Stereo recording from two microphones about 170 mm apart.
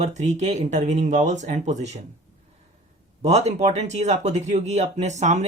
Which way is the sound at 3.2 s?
40° right (ahead or behind).